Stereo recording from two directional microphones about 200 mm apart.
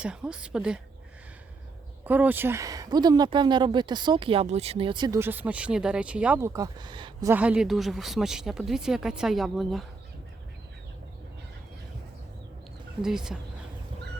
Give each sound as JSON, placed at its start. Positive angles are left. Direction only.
{"t": 0.0, "sound": "speech", "side_deg": -5}
{"t": 2.0, "sound": "speech", "side_deg": -10}
{"t": 7.3, "sound": "speech", "side_deg": -5}
{"t": 13.0, "sound": "speech", "side_deg": -5}